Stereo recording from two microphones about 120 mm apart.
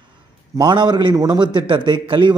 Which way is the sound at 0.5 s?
40° right (ahead or behind).